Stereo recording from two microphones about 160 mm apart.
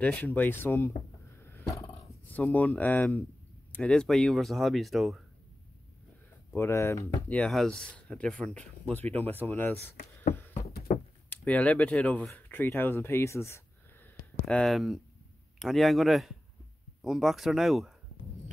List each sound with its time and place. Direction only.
0.0 s speech: 10° left (ahead or behind)
1.4 s a sound: 15° left (ahead or behind)
2.0 s speech: 10° left (ahead or behind)
6.5 s speech: 15° left (ahead or behind)
11.2 s speech: 10° left (ahead or behind)
14.4 s speech: centre (ahead or behind)